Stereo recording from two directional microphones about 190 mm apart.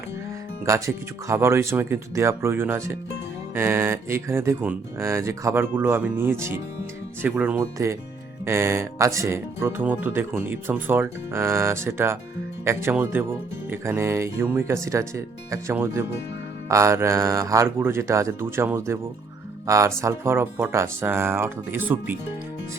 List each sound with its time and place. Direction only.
0.6 s speech: 15° right (ahead or behind)